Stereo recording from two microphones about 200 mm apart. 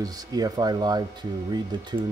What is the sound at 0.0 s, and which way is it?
Speech, 20° right (ahead or behind).